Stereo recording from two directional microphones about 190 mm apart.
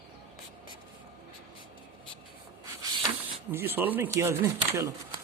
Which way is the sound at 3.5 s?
10° right (ahead or behind).